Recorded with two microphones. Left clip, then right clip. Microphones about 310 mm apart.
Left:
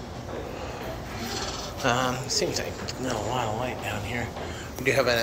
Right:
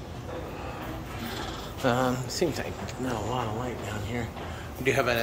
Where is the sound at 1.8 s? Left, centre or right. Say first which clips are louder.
Left 1 dB; centre.